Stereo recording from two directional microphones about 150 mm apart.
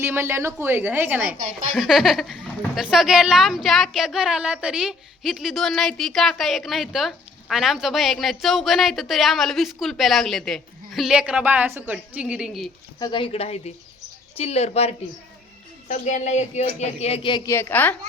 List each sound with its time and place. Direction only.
0.0 s a woman's voice: 15° right (ahead or behind)
13.0 s speech: 30° left (ahead or behind)
17.4 s a woman's voice: 15° left (ahead or behind)